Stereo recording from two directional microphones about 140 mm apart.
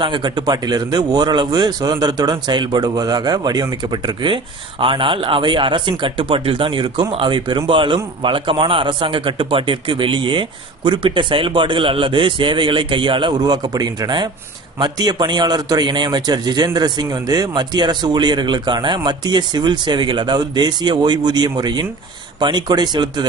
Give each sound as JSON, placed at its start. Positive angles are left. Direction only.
{"t": 0.0, "sound": "speech", "side_deg": -35}